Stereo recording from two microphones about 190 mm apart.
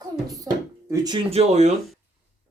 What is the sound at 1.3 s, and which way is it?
Speech, 35° right (ahead or behind).